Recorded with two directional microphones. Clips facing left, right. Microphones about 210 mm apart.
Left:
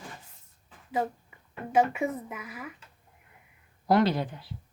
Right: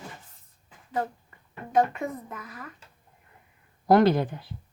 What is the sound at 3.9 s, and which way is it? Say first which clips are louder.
Speech: right 4 dB; 50° right (ahead or behind).